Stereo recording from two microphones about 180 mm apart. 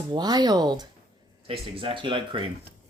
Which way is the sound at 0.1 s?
25° right (ahead or behind).